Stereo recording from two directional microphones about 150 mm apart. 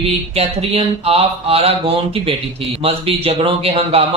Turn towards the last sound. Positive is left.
turn(degrees=-40)  # may be behind; listen again after turning